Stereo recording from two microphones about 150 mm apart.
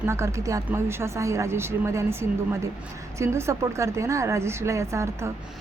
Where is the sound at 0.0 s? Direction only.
20° right (ahead or behind).